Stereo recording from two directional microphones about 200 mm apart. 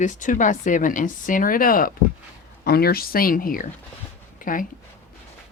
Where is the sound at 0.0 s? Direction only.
40° left (ahead or behind).